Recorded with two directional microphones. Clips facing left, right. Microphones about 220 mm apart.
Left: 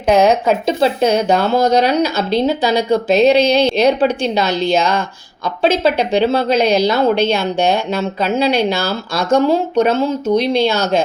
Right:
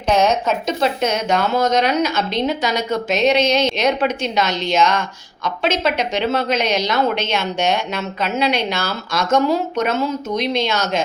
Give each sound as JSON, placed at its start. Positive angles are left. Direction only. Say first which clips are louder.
{"t": 0.1, "sound": "a woman's voice", "louder": "left 5 dB", "side_deg": 35}